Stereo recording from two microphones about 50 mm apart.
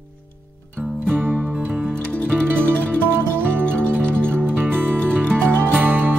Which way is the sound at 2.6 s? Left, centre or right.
Left.